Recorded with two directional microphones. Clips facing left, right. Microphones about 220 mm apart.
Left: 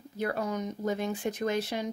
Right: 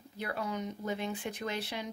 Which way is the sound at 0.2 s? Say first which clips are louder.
Left 5 dB; 45° left (ahead or behind).